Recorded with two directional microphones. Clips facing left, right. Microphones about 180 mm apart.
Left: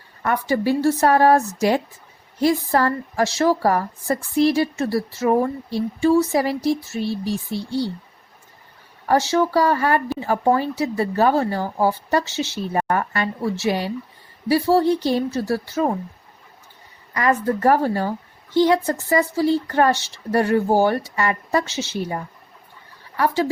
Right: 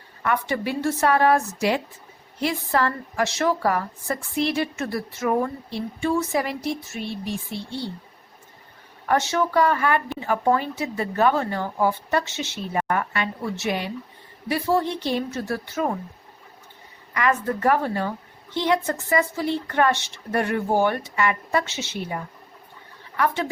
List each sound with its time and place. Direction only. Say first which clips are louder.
0.2 s a woman's voice: left 4 dB; 35° left (ahead or behind)
9.0 s a woman's voice: left 4 dB; 35° left (ahead or behind)
17.2 s a woman's voice: left 3 dB; 35° left (ahead or behind)